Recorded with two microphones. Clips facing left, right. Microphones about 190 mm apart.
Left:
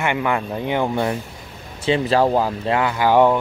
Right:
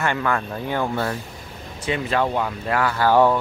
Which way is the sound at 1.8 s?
30° left (ahead or behind).